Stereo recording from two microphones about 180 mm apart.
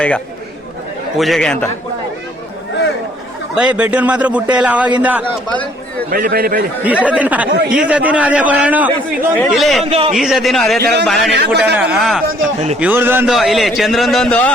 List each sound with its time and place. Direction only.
1.1 s a man's voice: centre (ahead or behind)
3.5 s a man's voice: 5° right (ahead or behind)
5.5 s speech: 10° left (ahead or behind)
6.1 s a man's voice: 55° right (ahead or behind)
6.8 s a man's voice: 5° right (ahead or behind)
9.8 s a man's voice: 30° right (ahead or behind)
10.1 s a man's voice: centre (ahead or behind)
10.8 s a man's voice: 70° right (ahead or behind)
11.8 s a man's voice: 5° right (ahead or behind)
12.3 s a man's voice: 45° right (ahead or behind)
12.8 s a man's voice: 10° right (ahead or behind)
13.3 s a man's voice: centre (ahead or behind)